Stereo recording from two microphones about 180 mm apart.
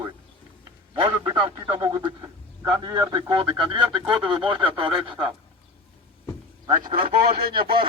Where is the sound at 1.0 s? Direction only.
25° right (ahead or behind).